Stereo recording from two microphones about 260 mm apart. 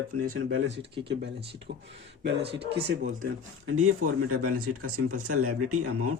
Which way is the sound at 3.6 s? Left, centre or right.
Right.